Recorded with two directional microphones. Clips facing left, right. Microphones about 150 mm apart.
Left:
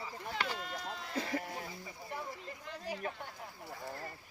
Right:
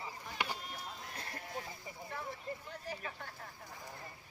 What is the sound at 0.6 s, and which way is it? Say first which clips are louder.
Sheep: left 5 dB; 90° left.